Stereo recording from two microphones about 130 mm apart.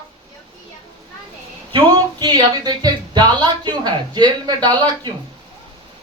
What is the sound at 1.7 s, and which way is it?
Speech, 30° right (ahead or behind).